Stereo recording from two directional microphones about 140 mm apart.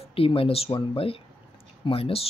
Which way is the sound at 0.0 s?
40° left (ahead or behind).